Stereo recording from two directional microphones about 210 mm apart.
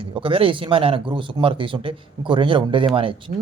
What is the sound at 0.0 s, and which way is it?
Speech, 25° right (ahead or behind).